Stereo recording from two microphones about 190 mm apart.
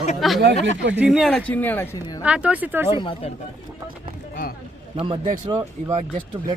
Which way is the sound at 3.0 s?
25° left (ahead or behind).